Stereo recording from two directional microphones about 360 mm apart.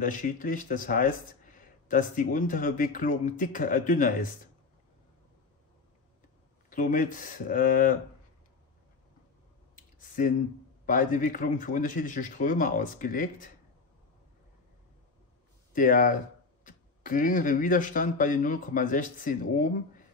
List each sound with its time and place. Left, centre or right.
0.0 s speech: left
6.7 s speech: left
9.9 s a sound: left
10.9 s speech: left
15.7 s speech: left